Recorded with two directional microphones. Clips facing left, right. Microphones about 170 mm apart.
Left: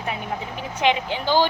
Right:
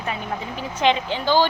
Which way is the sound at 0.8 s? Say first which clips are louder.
Right 1 dB; 15° left (ahead or behind).